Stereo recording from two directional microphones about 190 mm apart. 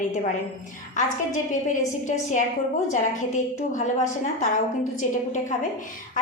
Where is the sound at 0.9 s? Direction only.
40° left (ahead or behind).